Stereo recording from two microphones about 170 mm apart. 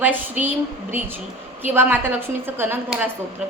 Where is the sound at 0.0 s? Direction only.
10° right (ahead or behind).